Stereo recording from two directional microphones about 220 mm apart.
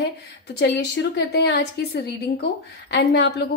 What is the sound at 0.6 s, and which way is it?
A woman's voice, 50° left (ahead or behind).